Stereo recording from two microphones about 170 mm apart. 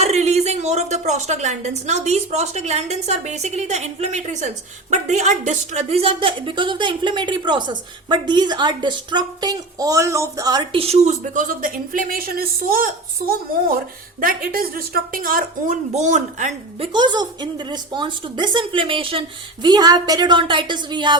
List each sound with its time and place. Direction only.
0.0 s a woman's voice: 40° right (ahead or behind)
16.9 s a woman's voice: 25° right (ahead or behind)